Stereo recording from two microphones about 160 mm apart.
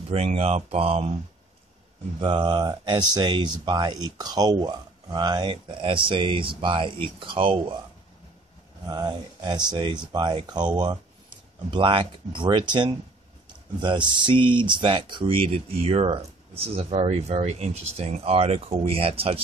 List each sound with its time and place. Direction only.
0.1 s speech: 40° right (ahead or behind)
2.1 s speech: 30° right (ahead or behind)
8.8 s speech: 25° right (ahead or behind)